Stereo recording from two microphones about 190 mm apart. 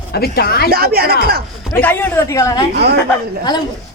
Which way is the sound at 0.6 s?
55° right (ahead or behind).